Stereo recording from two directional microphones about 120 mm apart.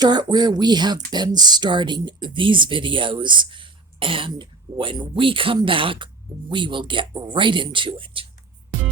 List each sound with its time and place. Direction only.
0.0 s speech: 35° right (ahead or behind)